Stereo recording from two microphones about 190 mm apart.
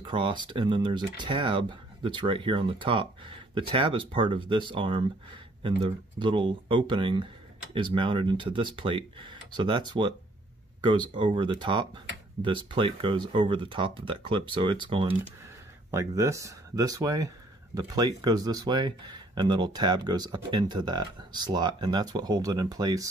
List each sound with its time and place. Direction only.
0.0 s speech: 25° right (ahead or behind)